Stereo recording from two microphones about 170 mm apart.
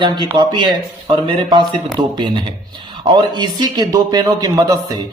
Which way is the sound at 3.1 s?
25° right (ahead or behind).